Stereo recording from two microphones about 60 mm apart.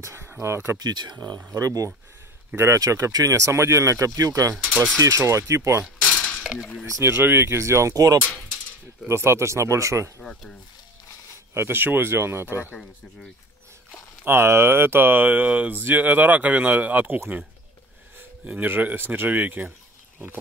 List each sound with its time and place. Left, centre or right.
0.0 s speech: right
0.7 s speech: right
1.5 s speech: right
2.5 s speech: right
2.8 s speech: right
6.1 s cutlery: left
7.0 s speech: right
7.9 s speech: right
9.0 s speech: right
11.5 s speech: right
14.2 s speech: right
18.4 s speech: right